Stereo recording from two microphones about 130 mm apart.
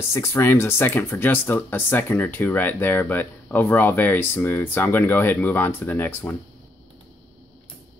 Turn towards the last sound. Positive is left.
turn(degrees=15)  # may be behind; listen again after turning